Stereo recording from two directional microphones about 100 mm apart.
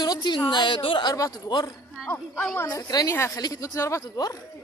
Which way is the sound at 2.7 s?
40° left (ahead or behind).